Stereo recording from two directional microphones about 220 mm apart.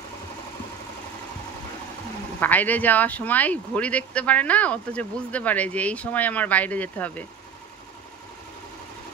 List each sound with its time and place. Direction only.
2.4 s speech: 10° left (ahead or behind)